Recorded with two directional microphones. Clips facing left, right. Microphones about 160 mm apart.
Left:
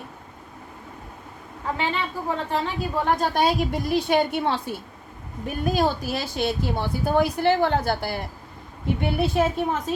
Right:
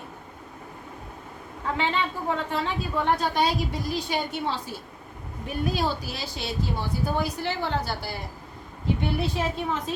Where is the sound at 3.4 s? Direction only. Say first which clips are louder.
Left 3 dB; 60° left (ahead or behind).